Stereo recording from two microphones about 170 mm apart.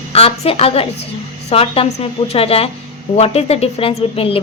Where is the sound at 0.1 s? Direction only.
35° left (ahead or behind).